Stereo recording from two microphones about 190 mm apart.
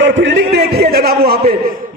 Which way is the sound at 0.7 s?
55° right (ahead or behind).